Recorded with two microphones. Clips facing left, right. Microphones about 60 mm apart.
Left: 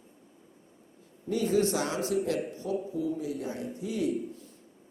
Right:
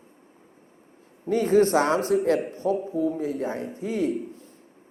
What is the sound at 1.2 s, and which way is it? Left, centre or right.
A man's voice, right.